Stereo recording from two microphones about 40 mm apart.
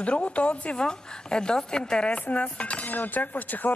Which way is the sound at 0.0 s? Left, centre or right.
Left.